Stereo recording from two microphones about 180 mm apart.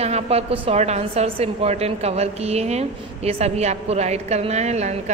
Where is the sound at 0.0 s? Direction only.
35° right (ahead or behind).